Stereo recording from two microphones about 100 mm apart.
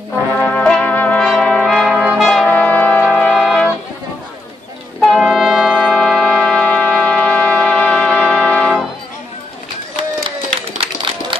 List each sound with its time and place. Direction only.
0.4 s brass instrument: 15° left (ahead or behind)
2.4 s brass instrument: 15° left (ahead or behind)
5.0 s brass instrument: 5° right (ahead or behind)
5.9 s music: centre (ahead or behind)
10.8 s run: 55° right (ahead or behind)